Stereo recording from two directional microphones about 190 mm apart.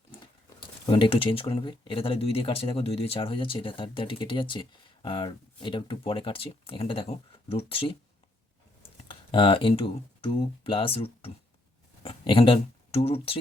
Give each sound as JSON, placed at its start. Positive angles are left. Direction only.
{"t": 0.9, "sound": "speech", "side_deg": 25}
{"t": 9.0, "sound": "speech", "side_deg": 30}